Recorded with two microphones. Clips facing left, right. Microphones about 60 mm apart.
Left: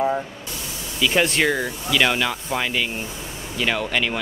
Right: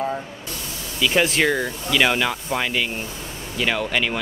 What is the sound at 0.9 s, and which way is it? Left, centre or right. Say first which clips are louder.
Speech: even; centre.